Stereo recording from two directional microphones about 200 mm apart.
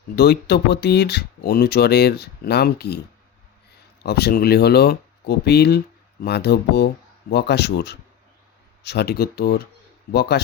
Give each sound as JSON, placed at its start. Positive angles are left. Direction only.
{"t": 0.2, "sound": "speech", "side_deg": 55}
{"t": 4.0, "sound": "speech", "side_deg": 55}